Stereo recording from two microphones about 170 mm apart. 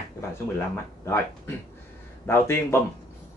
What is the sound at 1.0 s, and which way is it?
Speech, 15° left (ahead or behind).